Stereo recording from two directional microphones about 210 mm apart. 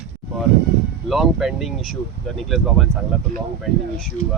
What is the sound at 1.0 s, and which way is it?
Speech, centre (ahead or behind).